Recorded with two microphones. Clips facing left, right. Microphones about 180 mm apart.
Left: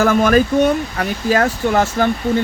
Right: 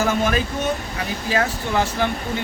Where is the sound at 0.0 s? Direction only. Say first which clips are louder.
Left 7 dB; 55° left (ahead or behind).